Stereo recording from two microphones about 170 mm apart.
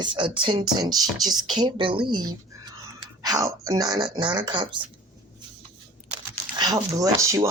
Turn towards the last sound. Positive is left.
turn(degrees=-20)  # may be behind; listen again after turning